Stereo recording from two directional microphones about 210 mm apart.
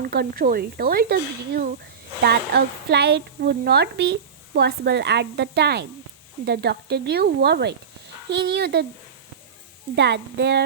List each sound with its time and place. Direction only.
0.0 s a woman's voice: 45° right (ahead or behind)
9.9 s a woman's voice: 55° right (ahead or behind)